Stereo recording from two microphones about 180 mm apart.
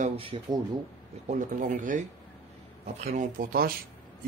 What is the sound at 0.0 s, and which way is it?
Speech, 30° right (ahead or behind).